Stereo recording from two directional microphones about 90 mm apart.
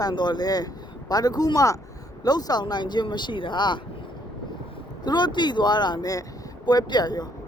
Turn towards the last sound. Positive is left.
turn(degrees=50)  # may be behind; listen again after turning